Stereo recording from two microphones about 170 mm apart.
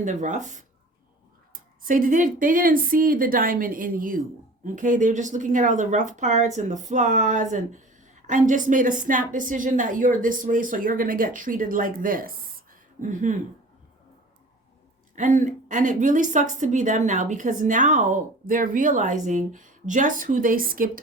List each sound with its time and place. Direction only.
0.0 s speech: 45° right (ahead or behind)
15.1 s speech: 50° right (ahead or behind)